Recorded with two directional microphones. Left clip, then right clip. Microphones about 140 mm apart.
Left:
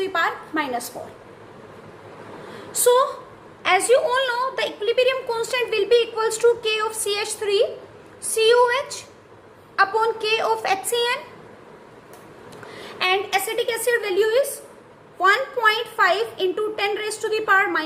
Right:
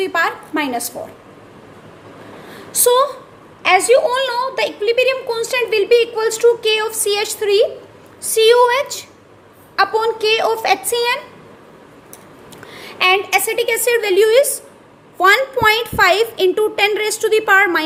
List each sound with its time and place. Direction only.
0.0 s a sound: 45° right (ahead or behind)
2.8 s a woman's voice: 40° right (ahead or behind)
12.7 s a woman's voice: 45° right (ahead or behind)